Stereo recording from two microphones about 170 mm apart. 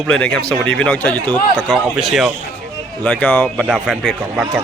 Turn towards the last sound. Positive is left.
turn(degrees=0)  # may be behind; listen again after turning